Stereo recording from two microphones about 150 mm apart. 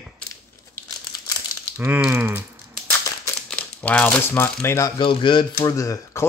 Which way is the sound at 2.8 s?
20° left (ahead or behind).